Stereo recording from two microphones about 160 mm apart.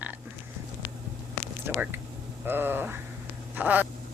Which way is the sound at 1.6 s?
15° right (ahead or behind).